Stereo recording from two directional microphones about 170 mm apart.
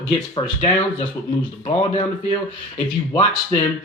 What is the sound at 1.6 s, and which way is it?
Speech, 35° left (ahead or behind).